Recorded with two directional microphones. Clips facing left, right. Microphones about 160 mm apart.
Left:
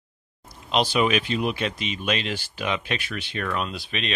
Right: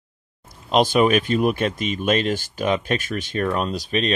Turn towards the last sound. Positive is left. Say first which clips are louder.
# right 8 dB
turn(degrees=-40)  # may be behind; listen again after turning